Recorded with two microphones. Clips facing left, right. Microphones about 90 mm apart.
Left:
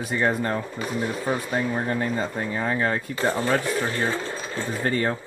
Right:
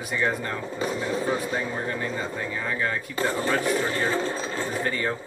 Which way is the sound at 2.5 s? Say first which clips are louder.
Left 5 dB; 40° left (ahead or behind).